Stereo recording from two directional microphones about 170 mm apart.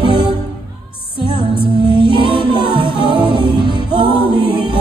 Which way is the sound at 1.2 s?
30° left (ahead or behind).